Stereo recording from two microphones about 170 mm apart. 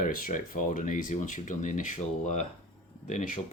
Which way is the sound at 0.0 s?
55° left (ahead or behind).